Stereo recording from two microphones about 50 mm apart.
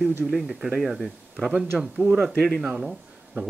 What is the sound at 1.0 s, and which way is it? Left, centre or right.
Speech, centre.